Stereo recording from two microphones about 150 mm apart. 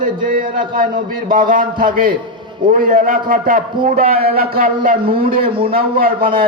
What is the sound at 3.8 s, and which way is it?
Speech, 50° right (ahead or behind).